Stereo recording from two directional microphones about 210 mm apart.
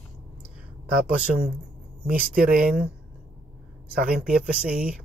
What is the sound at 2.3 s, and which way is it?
Speech, 45° right (ahead or behind).